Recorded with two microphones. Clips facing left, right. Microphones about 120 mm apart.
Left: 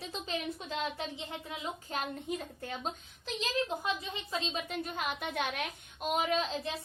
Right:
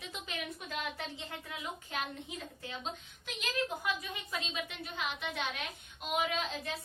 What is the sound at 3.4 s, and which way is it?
A woman's voice, 25° left (ahead or behind).